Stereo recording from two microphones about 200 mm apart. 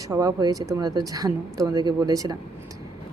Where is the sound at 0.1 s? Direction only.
15° right (ahead or behind).